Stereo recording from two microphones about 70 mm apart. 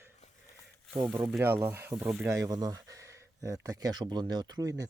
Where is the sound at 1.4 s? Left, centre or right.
Right.